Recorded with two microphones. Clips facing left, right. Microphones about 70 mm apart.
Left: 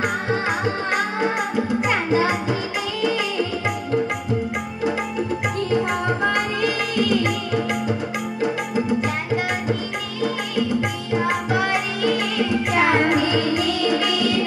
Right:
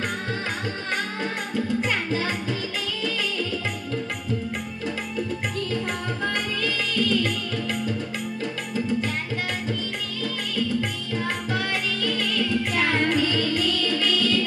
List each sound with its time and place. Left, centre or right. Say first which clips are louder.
0.0 s music: left 6 dB; centre
5.9 s music: left 7 dB; left
10.2 s music: left 6 dB; left